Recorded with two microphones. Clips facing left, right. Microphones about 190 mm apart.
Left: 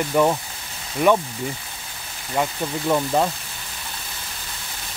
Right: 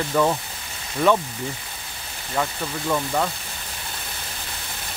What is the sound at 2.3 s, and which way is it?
Speech, 15° left (ahead or behind).